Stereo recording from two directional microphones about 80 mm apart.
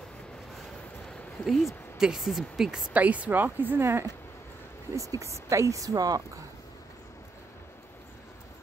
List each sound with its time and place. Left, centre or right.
1.0 s a sound: centre
2.0 s speech: centre
2.9 s speech: centre
4.9 s speech: right